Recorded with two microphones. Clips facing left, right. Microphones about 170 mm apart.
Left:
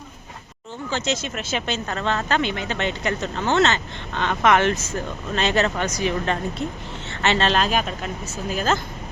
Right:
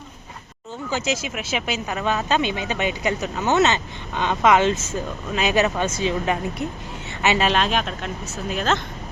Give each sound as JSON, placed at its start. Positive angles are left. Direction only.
{"t": 0.9, "sound": "speech", "side_deg": -10}
{"t": 5.3, "sound": "speech", "side_deg": -10}